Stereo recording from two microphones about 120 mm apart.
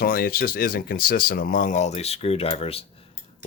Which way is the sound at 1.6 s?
85° left.